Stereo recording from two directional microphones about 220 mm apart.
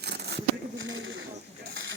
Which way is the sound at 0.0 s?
50° right (ahead or behind).